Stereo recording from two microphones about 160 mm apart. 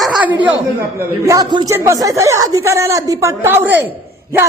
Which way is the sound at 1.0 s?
20° right (ahead or behind).